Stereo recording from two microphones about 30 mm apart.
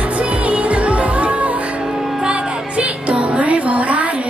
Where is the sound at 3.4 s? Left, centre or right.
Right.